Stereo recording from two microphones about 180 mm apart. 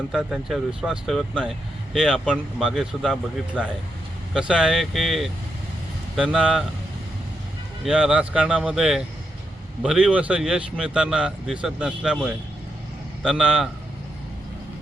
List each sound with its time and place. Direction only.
0.1 s speech: centre (ahead or behind)
7.9 s speech: 5° right (ahead or behind)